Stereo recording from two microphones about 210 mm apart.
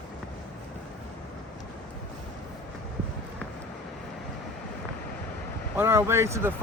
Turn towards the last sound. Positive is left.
turn(degrees=-10)  # may be behind; listen again after turning